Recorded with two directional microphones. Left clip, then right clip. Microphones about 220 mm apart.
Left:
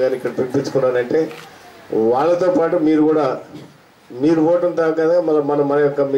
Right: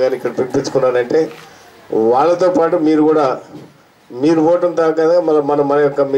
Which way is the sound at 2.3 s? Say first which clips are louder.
Right 3 dB; 20° left (ahead or behind).